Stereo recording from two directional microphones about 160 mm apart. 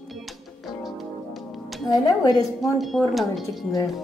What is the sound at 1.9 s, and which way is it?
Speech, 25° left (ahead or behind).